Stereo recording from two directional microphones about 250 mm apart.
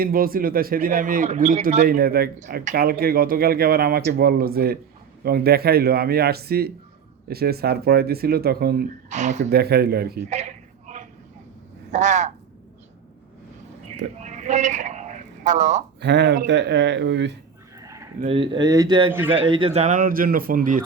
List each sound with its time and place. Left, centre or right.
0.0 s a man's voice: right
9.5 s a man's voice: right
10.2 s a sound: right
11.9 s speech: right
14.2 s a sound: right
16.0 s speech: right
17.7 s chicken: centre
18.2 s a man's voice: right